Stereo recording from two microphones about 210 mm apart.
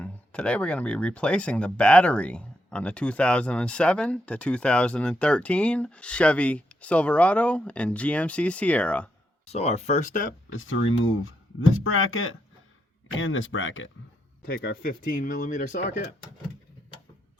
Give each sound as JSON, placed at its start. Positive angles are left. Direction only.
{"t": 0.0, "sound": "speech", "side_deg": 5}
{"t": 9.5, "sound": "speech", "side_deg": 30}
{"t": 10.6, "sound": "speech", "side_deg": 70}
{"t": 13.1, "sound": "speech", "side_deg": 65}
{"t": 14.8, "sound": "speech", "side_deg": 40}